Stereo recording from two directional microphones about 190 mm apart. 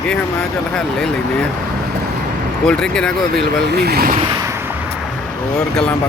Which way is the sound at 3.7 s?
55° right (ahead or behind).